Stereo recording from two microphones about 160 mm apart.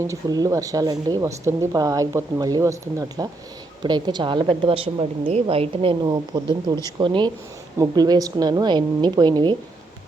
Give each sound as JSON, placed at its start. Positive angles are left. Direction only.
{"t": 0.0, "sound": "a woman's voice", "side_deg": -20}